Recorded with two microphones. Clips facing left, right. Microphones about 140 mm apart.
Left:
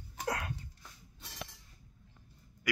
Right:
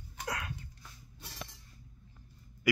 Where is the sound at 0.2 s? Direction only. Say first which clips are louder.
Left 3 dB; 40° left (ahead or behind).